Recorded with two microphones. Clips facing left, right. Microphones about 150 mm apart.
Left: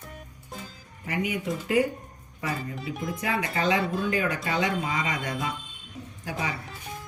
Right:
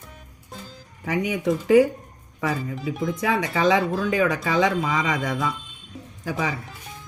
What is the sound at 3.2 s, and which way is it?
Speech, 90° right.